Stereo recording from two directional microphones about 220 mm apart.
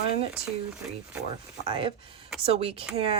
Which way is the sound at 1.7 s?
25° right (ahead or behind).